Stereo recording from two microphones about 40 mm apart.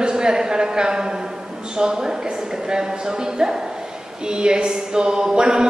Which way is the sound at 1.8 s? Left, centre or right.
Centre.